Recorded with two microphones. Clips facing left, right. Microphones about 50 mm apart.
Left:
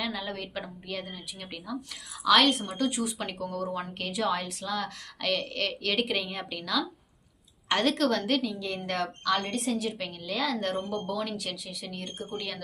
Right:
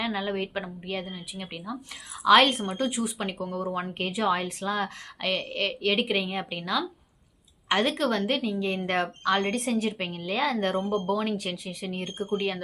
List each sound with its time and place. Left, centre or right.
0.0 s speech: right
2.2 s a woman's voice: right
2.9 s speech: centre; by 4.9 s right
5.2 s a woman's voice: centre